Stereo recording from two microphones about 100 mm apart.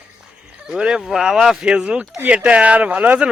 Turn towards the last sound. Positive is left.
turn(degrees=-15)  # may be behind; listen again after turning